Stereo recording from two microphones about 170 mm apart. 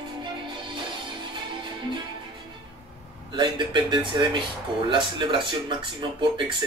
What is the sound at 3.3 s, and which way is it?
Speech, 30° right (ahead or behind).